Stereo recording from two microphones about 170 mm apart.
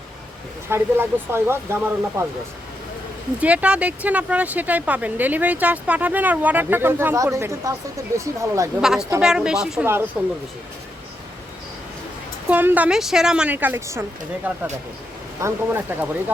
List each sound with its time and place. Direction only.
0.7 s speech: 15° right (ahead or behind)
3.4 s speech: 10° right (ahead or behind)
8.8 s a woman's voice: centre (ahead or behind)
9.8 s speech: 15° right (ahead or behind)
12.5 s speech: 10° right (ahead or behind)